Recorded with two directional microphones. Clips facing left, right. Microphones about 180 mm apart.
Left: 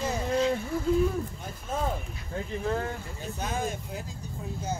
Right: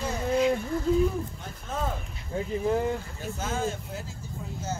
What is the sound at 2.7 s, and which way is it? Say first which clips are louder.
Speech: right 5 dB; 15° right (ahead or behind).